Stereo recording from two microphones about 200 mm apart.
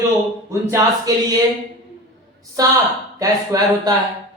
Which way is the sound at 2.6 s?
15° right (ahead or behind).